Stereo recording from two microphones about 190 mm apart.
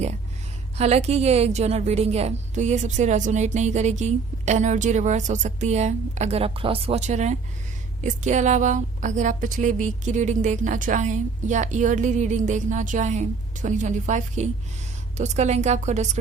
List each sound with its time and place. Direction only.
0.8 s a woman's voice: 35° right (ahead or behind)